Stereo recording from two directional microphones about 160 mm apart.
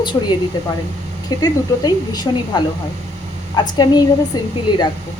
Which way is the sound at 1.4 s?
25° left (ahead or behind).